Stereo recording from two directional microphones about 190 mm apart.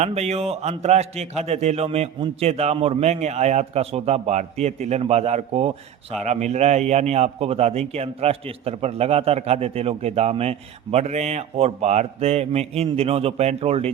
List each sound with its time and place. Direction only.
0.0 s a man's voice: 35° right (ahead or behind)